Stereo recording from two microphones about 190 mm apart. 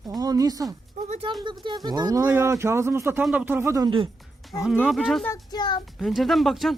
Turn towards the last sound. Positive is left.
turn(degrees=0)  # may be behind; listen again after turning